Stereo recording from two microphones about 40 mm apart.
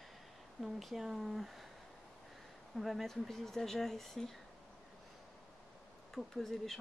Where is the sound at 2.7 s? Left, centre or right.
Centre.